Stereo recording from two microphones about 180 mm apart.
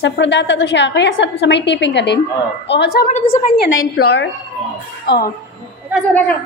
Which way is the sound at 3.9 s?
60° left (ahead or behind).